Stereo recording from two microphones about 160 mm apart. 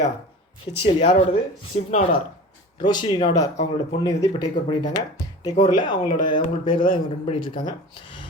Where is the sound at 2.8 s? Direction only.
30° left (ahead or behind).